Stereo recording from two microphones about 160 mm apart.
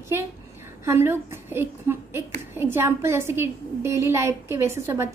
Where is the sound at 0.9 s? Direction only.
15° right (ahead or behind).